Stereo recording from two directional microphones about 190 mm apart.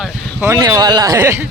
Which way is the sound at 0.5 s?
20° right (ahead or behind).